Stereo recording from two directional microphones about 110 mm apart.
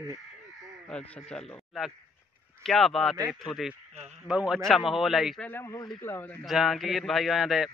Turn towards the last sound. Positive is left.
turn(degrees=0)  # may be behind; listen again after turning